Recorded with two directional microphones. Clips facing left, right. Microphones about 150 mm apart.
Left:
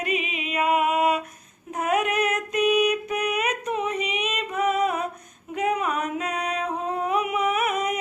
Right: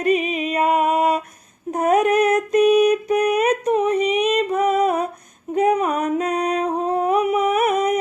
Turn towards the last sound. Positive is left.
turn(degrees=-35)  # may be behind; listen again after turning